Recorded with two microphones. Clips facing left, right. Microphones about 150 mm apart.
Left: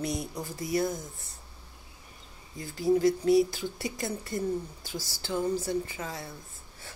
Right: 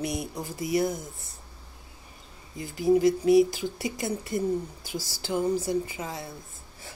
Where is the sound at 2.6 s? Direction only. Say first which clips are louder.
Right 3 dB; 15° right (ahead or behind).